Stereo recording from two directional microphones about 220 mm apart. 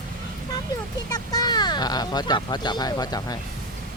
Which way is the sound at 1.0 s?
20° left (ahead or behind).